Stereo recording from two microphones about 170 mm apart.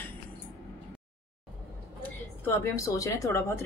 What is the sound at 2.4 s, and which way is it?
A woman's voice, 15° left (ahead or behind).